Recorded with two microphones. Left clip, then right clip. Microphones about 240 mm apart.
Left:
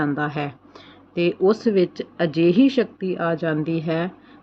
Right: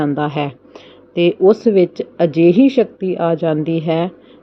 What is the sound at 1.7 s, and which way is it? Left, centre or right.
Speech, right.